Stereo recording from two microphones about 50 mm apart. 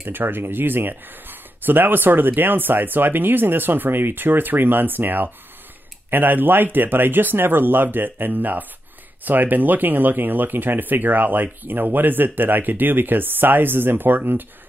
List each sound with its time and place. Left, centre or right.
0.0 s speech: right